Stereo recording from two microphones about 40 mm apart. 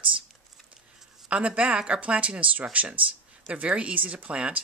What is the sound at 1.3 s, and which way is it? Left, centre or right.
Speech, right.